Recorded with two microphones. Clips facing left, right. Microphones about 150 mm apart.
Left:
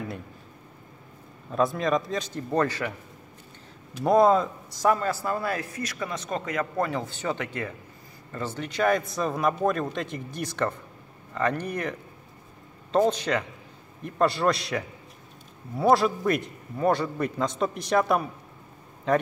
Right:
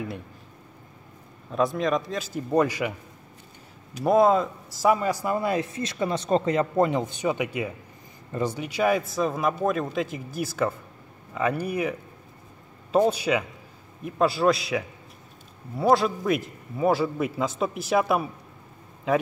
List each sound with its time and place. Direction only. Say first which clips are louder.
1.5 s a man's voice: even; centre (ahead or behind)
4.0 s a man's voice: even; centre (ahead or behind)